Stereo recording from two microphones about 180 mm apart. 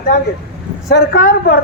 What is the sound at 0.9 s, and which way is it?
Speech, 55° left (ahead or behind).